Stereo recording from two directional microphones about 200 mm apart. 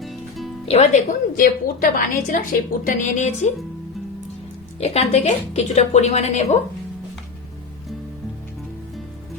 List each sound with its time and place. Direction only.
0.0 s music: centre (ahead or behind)
0.6 s speech: 30° left (ahead or behind)
1.4 s a woman's voice: 45° left (ahead or behind)
4.8 s a woman's voice: 35° left (ahead or behind)